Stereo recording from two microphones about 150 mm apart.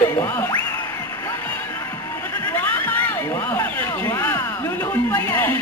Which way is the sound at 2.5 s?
10° left (ahead or behind).